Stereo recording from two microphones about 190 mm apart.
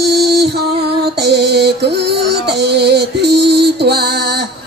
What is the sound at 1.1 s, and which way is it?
Music, 60° right (ahead or behind).